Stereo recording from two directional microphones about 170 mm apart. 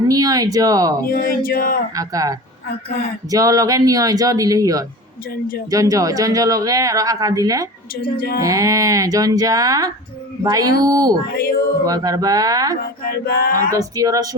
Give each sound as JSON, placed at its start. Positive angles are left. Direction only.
{"t": 0.1, "sound": "speech", "side_deg": -20}
{"t": 1.0, "sound": "male singing", "side_deg": 60}
{"t": 2.0, "sound": "speech", "side_deg": -20}
{"t": 5.3, "sound": "male singing", "side_deg": 60}
{"t": 5.7, "sound": "speech", "side_deg": -20}
{"t": 8.1, "sound": "male singing", "side_deg": 60}
{"t": 8.4, "sound": "speech", "side_deg": -20}
{"t": 11.3, "sound": "male singing", "side_deg": 60}
{"t": 11.9, "sound": "speech", "side_deg": -20}
{"t": 12.8, "sound": "male singing", "side_deg": 60}
{"t": 13.7, "sound": "speech", "side_deg": -20}